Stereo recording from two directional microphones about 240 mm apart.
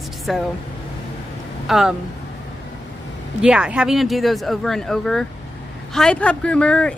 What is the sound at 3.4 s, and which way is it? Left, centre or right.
Speech, centre.